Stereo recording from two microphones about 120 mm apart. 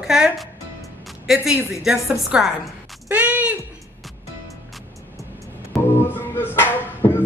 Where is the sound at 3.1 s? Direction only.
15° right (ahead or behind).